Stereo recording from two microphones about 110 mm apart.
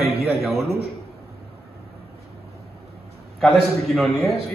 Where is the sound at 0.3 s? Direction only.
Centre (ahead or behind).